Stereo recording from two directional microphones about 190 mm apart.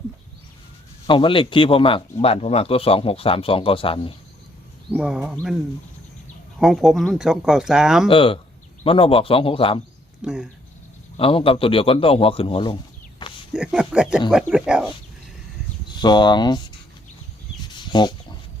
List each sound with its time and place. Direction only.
1.0 s speech: 25° left (ahead or behind)
4.9 s speech: 5° right (ahead or behind)
6.6 s speech: centre (ahead or behind)
8.0 s speech: 30° left (ahead or behind)
10.2 s speech: 5° right (ahead or behind)
11.2 s speech: 30° left (ahead or behind)
13.5 s speech: 5° right (ahead or behind)
16.0 s speech: 25° left (ahead or behind)
17.6 s chicken: 25° left (ahead or behind)